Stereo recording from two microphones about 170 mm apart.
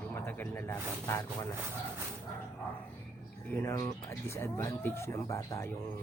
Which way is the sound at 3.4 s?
15° left (ahead or behind).